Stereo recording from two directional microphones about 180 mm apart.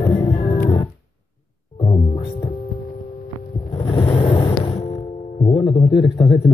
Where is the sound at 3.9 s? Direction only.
30° left (ahead or behind).